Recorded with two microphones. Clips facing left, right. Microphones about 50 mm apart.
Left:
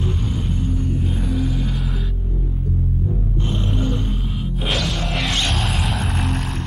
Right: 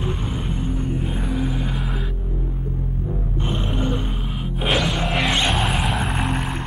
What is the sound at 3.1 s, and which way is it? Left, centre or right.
Music, centre.